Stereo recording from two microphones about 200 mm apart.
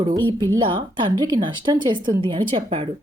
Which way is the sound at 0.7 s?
25° right (ahead or behind).